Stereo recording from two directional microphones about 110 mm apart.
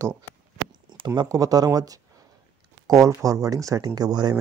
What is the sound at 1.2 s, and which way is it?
Speech, 35° right (ahead or behind).